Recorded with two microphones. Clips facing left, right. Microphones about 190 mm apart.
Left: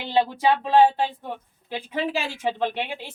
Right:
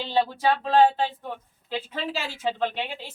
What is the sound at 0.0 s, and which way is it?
A woman's voice, 15° left (ahead or behind).